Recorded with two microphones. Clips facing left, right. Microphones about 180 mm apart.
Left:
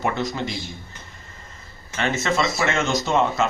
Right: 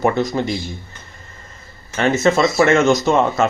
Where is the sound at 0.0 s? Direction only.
45° right (ahead or behind).